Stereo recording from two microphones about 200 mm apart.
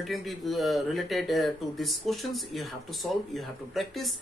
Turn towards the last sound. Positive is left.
turn(degrees=0)  # may be behind; listen again after turning